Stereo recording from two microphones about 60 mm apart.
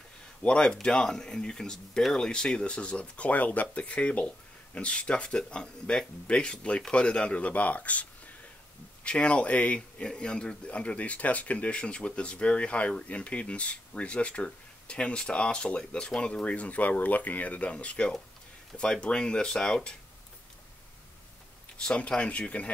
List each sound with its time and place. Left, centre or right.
0.4 s speech: centre
21.8 s speech: centre